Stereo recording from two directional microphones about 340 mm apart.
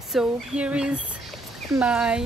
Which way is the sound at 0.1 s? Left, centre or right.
Centre.